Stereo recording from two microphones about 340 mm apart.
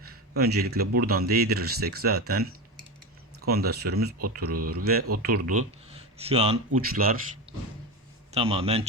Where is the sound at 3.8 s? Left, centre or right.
Right.